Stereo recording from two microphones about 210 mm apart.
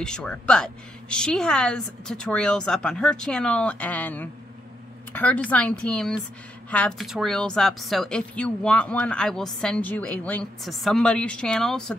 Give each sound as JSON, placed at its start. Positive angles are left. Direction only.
{"t": 0.0, "sound": "speech", "side_deg": 5}